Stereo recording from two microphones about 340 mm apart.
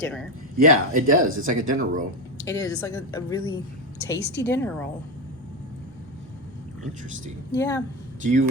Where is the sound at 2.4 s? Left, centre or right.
Centre.